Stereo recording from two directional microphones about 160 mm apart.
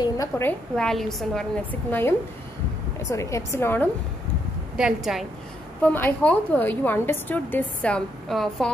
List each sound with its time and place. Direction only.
0.4 s a woman's voice: 10° left (ahead or behind)
4.7 s a woman's voice: 5° right (ahead or behind)
5.8 s a woman's voice: 10° left (ahead or behind)